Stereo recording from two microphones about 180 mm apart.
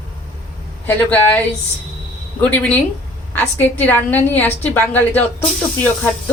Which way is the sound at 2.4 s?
5° left (ahead or behind).